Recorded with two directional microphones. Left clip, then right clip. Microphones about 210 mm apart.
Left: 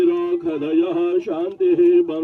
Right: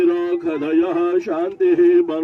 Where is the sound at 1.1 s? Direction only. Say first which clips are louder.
Right 2 dB; 15° right (ahead or behind).